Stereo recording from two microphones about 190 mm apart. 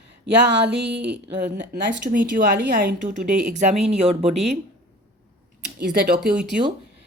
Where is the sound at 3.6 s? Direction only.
40° right (ahead or behind).